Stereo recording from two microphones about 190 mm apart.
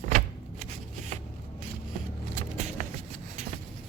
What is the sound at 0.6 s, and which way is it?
Shuffling cards, 40° right (ahead or behind).